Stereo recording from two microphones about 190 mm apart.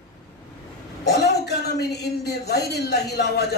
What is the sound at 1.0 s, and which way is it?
A man's voice, 60° left (ahead or behind).